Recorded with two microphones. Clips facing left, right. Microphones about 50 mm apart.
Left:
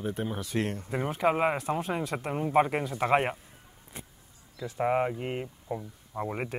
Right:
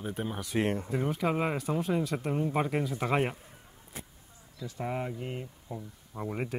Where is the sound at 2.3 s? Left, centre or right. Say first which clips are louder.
Left 8 dB; left.